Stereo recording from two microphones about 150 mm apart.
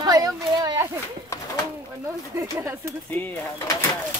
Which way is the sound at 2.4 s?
20° right (ahead or behind).